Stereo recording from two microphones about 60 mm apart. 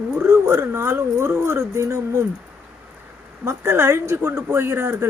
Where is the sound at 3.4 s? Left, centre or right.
Right.